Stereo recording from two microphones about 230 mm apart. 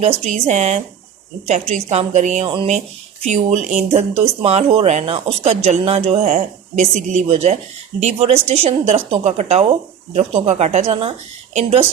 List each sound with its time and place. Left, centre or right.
0.0 s speech: right